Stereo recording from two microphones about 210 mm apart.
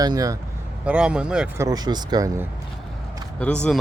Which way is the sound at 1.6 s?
20° right (ahead or behind).